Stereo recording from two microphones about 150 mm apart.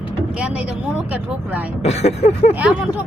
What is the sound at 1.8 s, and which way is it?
Speech, 45° left (ahead or behind).